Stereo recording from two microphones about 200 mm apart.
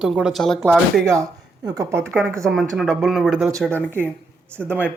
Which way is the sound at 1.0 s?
15° right (ahead or behind).